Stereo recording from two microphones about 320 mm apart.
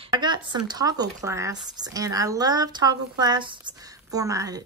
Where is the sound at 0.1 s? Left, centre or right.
Centre.